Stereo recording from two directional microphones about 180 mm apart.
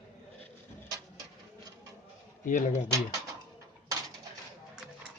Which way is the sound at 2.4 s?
45° left (ahead or behind).